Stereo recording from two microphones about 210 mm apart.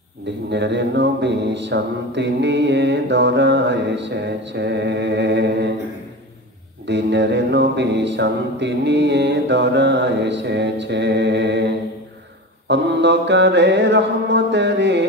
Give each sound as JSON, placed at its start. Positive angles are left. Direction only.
{"t": 0.5, "sound": "mantra", "side_deg": -55}
{"t": 6.9, "sound": "mantra", "side_deg": -55}